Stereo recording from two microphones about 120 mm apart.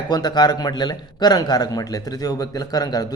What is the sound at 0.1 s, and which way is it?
A man's voice, 35° left (ahead or behind).